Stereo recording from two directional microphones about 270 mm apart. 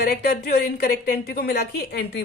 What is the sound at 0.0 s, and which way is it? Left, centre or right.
A woman's voice, left.